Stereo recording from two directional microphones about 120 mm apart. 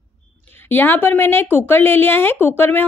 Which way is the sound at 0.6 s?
15° left (ahead or behind).